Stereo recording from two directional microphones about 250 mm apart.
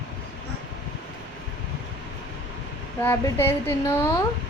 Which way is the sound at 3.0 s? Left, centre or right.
Centre.